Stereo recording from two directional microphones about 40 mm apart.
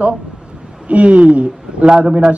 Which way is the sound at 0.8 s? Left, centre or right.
Right.